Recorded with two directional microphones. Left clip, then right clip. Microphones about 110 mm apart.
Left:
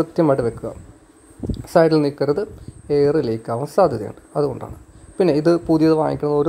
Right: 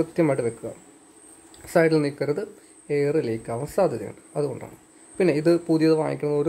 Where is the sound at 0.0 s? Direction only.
30° left (ahead or behind).